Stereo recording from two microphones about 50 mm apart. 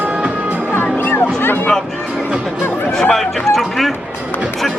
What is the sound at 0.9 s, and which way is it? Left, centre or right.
Music, left.